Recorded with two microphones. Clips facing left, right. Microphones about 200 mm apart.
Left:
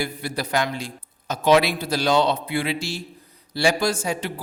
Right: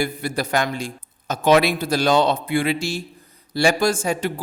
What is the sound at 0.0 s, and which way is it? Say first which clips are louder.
A man's voice: right 4 dB; 50° right (ahead or behind).